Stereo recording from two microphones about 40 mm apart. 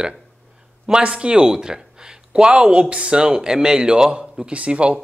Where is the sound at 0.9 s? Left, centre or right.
Right.